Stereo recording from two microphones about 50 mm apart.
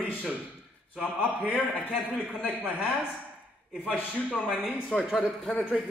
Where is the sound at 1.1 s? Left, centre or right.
Right.